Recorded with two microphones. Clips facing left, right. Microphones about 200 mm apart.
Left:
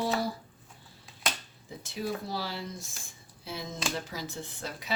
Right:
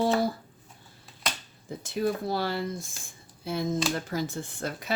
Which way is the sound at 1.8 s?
50° right (ahead or behind).